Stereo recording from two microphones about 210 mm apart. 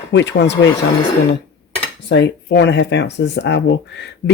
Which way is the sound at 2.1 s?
55° left (ahead or behind).